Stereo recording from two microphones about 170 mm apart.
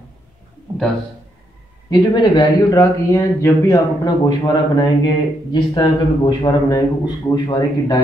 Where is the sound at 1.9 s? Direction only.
25° left (ahead or behind).